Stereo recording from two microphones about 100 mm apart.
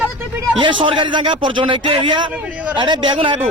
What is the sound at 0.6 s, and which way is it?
A man's voice, 60° right (ahead or behind).